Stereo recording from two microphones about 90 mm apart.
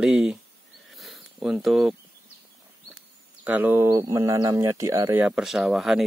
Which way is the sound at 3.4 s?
20° right (ahead or behind).